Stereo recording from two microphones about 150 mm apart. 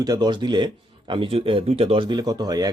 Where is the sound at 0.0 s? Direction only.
25° right (ahead or behind).